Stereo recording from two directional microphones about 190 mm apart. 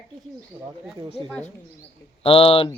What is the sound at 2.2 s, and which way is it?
Speech, 30° left (ahead or behind).